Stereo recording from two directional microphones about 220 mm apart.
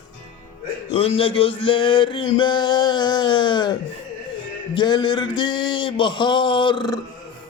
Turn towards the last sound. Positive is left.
turn(degrees=20)  # may be behind; listen again after turning